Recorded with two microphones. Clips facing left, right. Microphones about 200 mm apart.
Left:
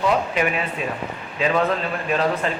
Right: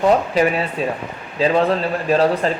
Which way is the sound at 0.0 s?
35° right (ahead or behind).